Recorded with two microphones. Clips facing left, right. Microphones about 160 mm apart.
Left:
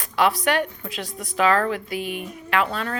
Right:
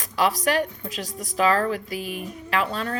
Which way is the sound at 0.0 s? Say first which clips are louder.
Left 2 dB; 40° right (ahead or behind).